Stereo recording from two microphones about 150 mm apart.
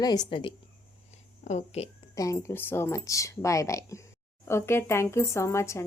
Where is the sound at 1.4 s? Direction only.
45° left (ahead or behind).